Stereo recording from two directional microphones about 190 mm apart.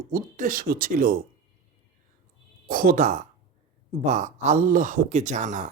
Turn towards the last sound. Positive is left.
turn(degrees=-40)  # may be behind; listen again after turning